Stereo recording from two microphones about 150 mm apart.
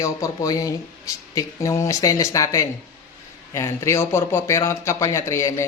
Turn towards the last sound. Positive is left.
turn(degrees=20)  # may be behind; listen again after turning